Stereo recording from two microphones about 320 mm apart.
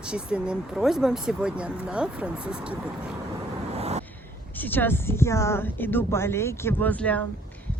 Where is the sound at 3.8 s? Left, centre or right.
Centre.